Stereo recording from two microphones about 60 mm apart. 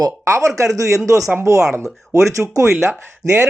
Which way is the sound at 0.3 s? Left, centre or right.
Right.